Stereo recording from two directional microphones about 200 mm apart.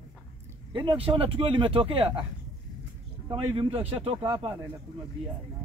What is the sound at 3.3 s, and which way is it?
A man's voice, 25° right (ahead or behind).